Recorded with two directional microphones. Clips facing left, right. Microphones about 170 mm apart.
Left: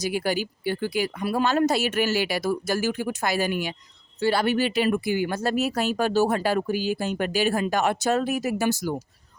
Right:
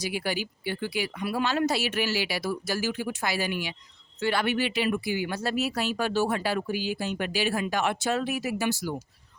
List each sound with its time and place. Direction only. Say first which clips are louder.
0.0 s speech: left 5 dB; 45° left (ahead or behind)